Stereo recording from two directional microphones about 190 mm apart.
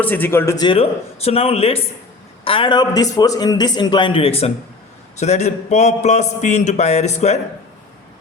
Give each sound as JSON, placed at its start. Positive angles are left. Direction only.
{"t": 0.0, "sound": "a man's voice", "side_deg": 10}